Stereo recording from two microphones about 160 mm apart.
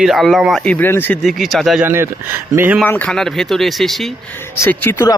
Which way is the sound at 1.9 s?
15° right (ahead or behind).